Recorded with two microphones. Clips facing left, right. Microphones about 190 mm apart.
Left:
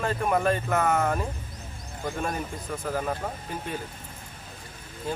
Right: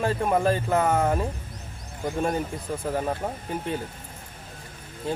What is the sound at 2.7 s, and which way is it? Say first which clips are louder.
Speech: right 2 dB; 30° right (ahead or behind).